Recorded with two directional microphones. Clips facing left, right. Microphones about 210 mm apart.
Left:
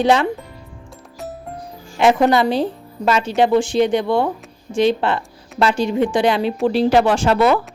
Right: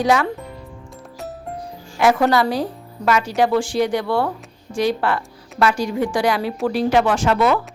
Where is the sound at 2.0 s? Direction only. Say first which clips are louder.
Left 2 dB; 20° left (ahead or behind).